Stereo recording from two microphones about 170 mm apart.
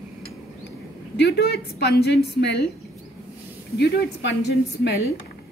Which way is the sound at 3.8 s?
90° left.